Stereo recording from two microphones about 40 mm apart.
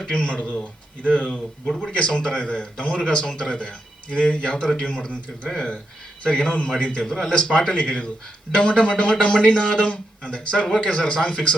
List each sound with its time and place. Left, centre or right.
0.0 s speech: left
5.5 s speech: centre
6.2 s a man's voice: left
7.0 s speech: centre
7.7 s speech: left